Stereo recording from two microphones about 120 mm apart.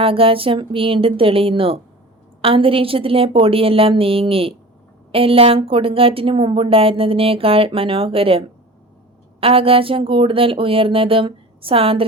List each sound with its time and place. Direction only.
0.0 s speech: 50° right (ahead or behind)